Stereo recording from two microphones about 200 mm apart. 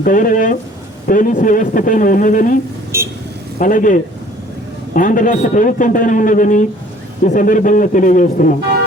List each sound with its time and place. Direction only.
0.0 s speech: 45° left (ahead or behind)
2.9 s speech: 15° right (ahead or behind)
3.6 s a man's voice: 40° left (ahead or behind)